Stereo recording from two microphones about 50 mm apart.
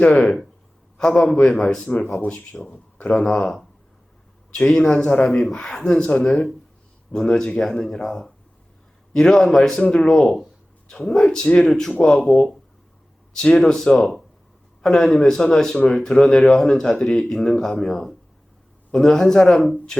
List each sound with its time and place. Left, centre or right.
0.1 s speech: centre
2.2 s speech: left
3.1 s speech: centre
4.5 s speech: centre
6.0 s speech: left
6.2 s speech: centre
11.3 s speech: centre
11.6 s speech: centre